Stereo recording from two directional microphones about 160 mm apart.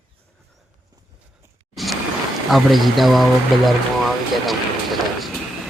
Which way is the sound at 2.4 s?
Centre (ahead or behind).